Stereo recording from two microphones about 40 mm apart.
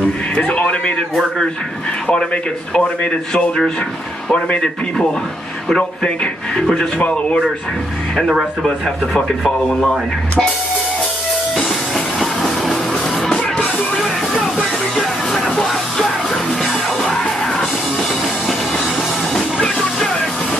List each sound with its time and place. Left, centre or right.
0.4 s a man's voice: left
2.7 s a man's voice: left
6.0 s a man's voice: left
8.6 s speech: centre
11.6 s music: centre
13.3 s music: left
15.3 s music: centre